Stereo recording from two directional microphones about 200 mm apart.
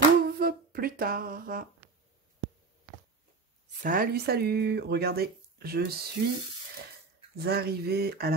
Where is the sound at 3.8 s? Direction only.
50° right (ahead or behind).